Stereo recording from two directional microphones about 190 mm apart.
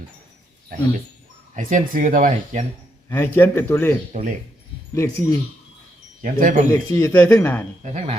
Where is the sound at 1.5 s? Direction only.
40° right (ahead or behind).